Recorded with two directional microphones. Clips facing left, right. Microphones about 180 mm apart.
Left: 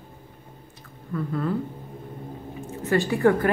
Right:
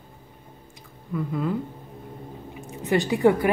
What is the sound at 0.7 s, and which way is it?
Squish, 15° right (ahead or behind).